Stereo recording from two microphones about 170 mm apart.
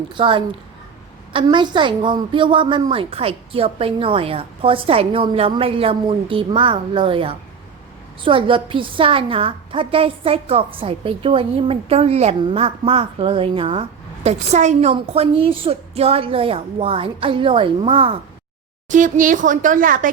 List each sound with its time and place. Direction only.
0.1 s a woman's voice: 30° right (ahead or behind)
14.3 s a woman's voice: 40° right (ahead or behind)
18.9 s speech: 50° right (ahead or behind)